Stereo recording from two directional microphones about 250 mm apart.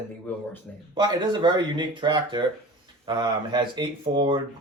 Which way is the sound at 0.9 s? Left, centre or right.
Centre.